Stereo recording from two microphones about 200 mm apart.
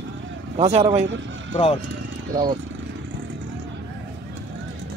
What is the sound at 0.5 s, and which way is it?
Speech, 30° right (ahead or behind).